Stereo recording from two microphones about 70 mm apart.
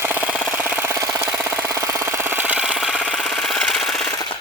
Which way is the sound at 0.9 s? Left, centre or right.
Right.